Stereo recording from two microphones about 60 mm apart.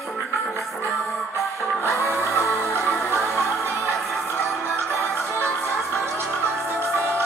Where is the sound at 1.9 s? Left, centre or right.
Left.